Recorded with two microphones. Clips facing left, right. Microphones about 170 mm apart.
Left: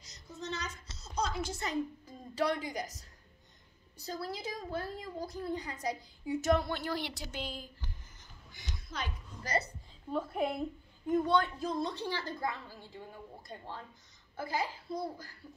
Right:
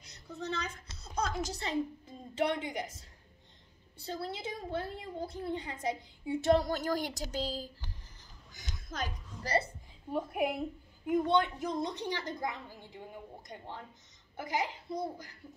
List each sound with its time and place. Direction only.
0.0 s a woman's voice: 60° right (ahead or behind); by 7.7 s 35° right (ahead or behind)
8.2 s music: 45° right (ahead or behind)
10.1 s a woman's voice: 15° right (ahead or behind)
14.3 s a woman's voice: 20° right (ahead or behind)